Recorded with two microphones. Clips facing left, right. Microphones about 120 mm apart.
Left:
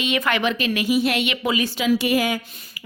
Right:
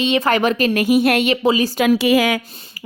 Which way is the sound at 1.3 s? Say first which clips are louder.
Right 7 dB; 30° right (ahead or behind).